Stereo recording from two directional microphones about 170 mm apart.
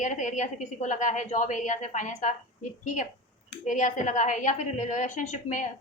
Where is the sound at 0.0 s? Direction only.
45° left (ahead or behind).